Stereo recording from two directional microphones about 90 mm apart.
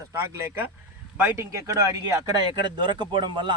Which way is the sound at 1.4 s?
35° right (ahead or behind).